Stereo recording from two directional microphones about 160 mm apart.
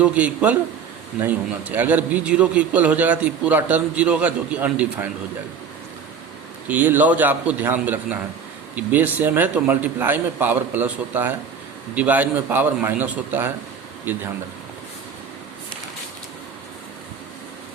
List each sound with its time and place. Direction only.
0.0 s a man's voice: 10° right (ahead or behind)
6.7 s a man's voice: 10° right (ahead or behind)